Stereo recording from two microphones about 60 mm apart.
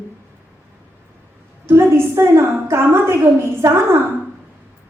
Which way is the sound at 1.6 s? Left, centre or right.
Right.